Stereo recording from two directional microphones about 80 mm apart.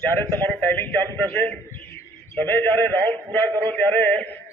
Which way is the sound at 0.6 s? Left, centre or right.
Left.